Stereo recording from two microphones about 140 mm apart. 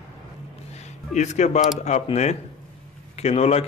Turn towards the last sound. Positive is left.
turn(degrees=45)  # may be behind; listen again after turning